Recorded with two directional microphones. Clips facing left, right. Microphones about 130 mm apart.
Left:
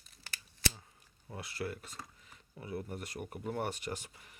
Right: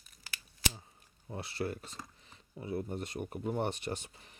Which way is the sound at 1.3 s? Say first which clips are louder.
Right 3 dB; 30° right (ahead or behind).